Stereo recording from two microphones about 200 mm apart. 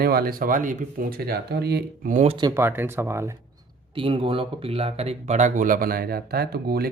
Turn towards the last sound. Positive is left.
turn(degrees=-50)  # may be behind; listen again after turning